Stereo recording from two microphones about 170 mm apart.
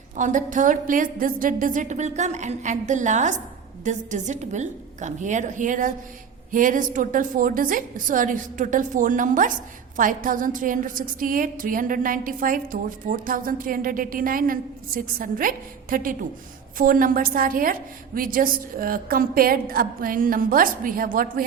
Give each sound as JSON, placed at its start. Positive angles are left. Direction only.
{"t": 0.2, "sound": "a woman's voice", "side_deg": -50}